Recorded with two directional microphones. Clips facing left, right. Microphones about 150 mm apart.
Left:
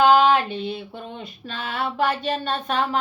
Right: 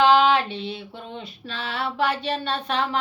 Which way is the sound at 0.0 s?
45° left (ahead or behind).